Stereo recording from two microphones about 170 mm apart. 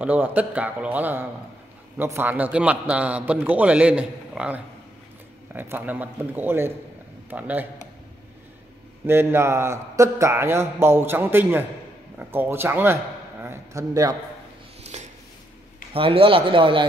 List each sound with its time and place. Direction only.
0.0 s a man's voice: 10° right (ahead or behind)
9.0 s a man's voice: 15° right (ahead or behind)
14.8 s a sound: 40° right (ahead or behind)
15.9 s speech: 30° right (ahead or behind)